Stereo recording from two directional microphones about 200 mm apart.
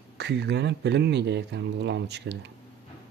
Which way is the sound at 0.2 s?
55° right (ahead or behind).